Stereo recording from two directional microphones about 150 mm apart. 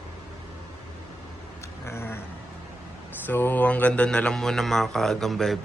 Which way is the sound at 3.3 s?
10° left (ahead or behind).